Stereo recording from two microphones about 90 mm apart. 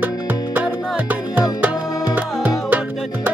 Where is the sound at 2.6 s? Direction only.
20° right (ahead or behind).